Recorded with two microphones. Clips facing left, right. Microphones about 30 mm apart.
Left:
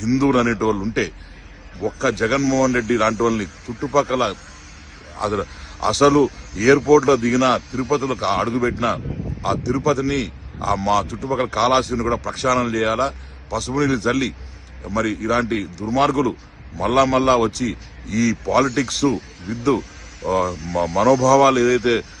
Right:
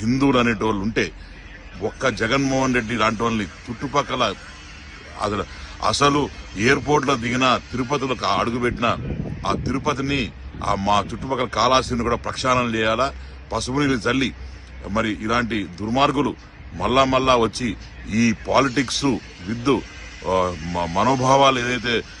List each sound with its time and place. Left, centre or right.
0.0 s a man's voice: right
3.7 s speech: right
5.4 s a man's voice: right
11.1 s a man's voice: right
19.1 s speech: right